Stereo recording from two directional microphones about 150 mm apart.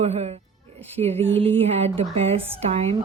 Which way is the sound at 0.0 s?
45° right (ahead or behind).